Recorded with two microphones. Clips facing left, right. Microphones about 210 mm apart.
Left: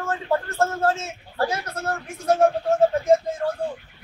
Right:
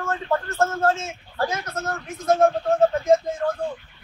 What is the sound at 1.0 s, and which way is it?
Speech, 35° left (ahead or behind).